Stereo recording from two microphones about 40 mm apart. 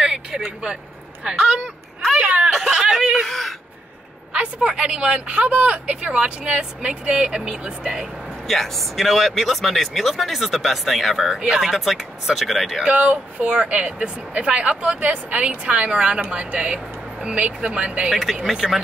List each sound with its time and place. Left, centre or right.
0.0 s vehicle: centre
1.2 s a woman's voice: right
2.7 s speech: centre
3.3 s speech: centre
4.6 s speech: right
8.5 s speech: centre
11.4 s speech: centre
11.7 s speech: centre
12.8 s a woman's voice: right
14.8 s a woman's voice: right
18.1 s speech: centre